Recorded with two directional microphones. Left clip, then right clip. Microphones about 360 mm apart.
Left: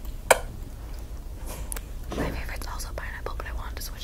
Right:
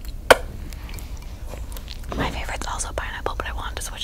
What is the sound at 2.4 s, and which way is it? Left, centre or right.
Whispering, right.